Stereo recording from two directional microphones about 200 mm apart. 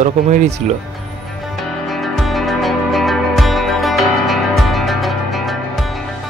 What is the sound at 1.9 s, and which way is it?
Music, centre (ahead or behind).